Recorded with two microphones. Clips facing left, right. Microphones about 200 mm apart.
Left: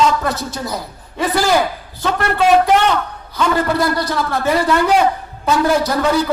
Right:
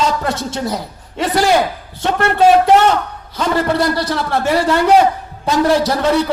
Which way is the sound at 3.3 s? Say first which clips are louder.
Right 1 dB; 25° right (ahead or behind).